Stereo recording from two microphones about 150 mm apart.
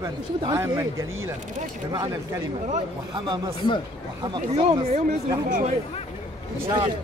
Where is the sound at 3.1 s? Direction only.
25° right (ahead or behind).